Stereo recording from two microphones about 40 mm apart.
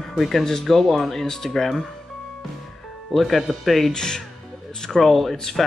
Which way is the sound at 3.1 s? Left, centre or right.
Centre.